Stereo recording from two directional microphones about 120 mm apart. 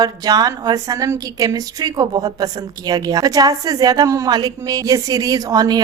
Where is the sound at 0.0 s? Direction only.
35° right (ahead or behind).